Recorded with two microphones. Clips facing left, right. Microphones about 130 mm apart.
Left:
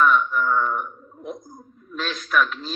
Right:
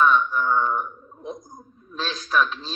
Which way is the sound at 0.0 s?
30° right (ahead or behind).